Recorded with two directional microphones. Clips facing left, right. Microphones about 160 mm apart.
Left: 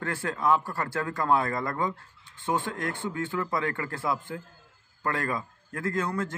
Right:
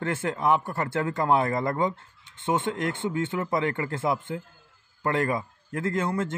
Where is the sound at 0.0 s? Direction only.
20° right (ahead or behind).